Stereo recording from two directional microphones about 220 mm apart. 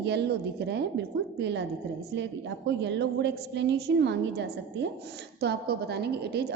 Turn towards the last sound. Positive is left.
turn(degrees=-45)  # may be behind; listen again after turning